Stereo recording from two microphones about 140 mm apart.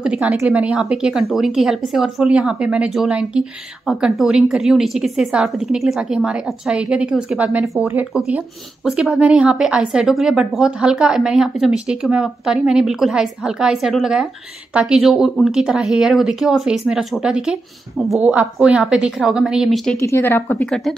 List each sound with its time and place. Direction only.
0.0 s a woman's voice: 10° right (ahead or behind)
20.0 s speech: 20° left (ahead or behind)